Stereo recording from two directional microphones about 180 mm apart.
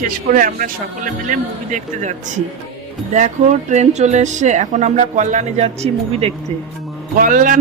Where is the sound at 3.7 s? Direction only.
40° right (ahead or behind).